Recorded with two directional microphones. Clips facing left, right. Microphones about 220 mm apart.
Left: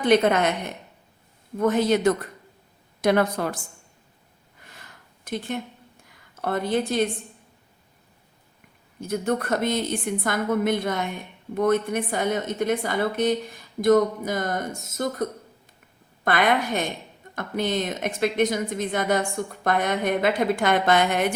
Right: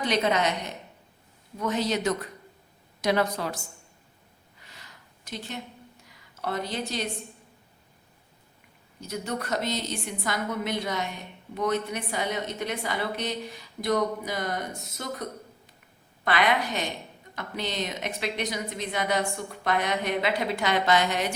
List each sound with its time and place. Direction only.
0.0 s a woman's voice: 55° left (ahead or behind)
4.6 s a sound: 50° left (ahead or behind)
6.1 s speech: 50° left (ahead or behind)
9.0 s a woman's voice: 50° left (ahead or behind)